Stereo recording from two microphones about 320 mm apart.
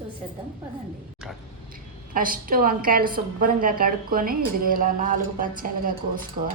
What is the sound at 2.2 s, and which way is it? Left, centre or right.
A woman's voice, right.